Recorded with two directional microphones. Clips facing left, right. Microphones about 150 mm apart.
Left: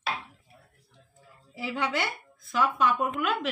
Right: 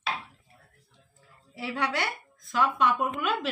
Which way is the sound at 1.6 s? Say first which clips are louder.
Even; centre (ahead or behind).